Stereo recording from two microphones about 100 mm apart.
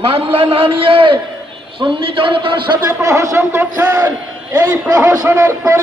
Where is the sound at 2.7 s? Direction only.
35° right (ahead or behind).